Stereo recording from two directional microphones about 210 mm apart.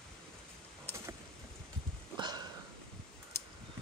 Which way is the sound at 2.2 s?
20° right (ahead or behind).